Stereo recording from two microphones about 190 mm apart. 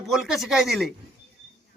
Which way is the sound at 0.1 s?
Centre (ahead or behind).